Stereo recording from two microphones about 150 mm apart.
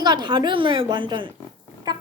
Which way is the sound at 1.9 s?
30° right (ahead or behind).